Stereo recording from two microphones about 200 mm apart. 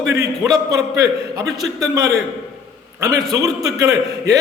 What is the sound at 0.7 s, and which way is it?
A man's voice, 15° right (ahead or behind).